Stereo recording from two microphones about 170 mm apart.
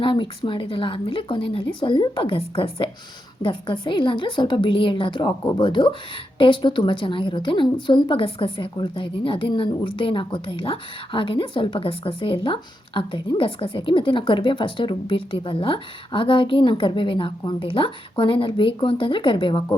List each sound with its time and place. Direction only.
0.0 s a woman's voice: 30° left (ahead or behind)